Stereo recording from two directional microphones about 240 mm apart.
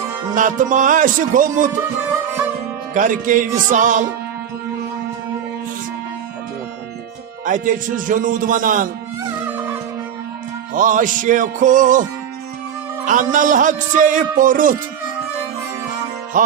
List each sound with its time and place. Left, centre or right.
0.3 s a man's voice: right
2.9 s a man's voice: right
7.4 s a man's voice: right
10.8 s a man's voice: right
13.1 s a man's voice: right